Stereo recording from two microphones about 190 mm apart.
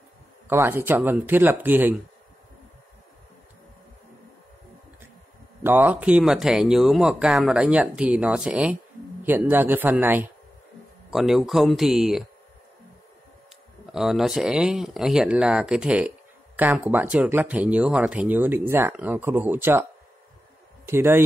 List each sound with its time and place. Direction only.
0.5 s speech: 10° right (ahead or behind)
5.6 s speech: 10° right (ahead or behind)
13.9 s speech: centre (ahead or behind)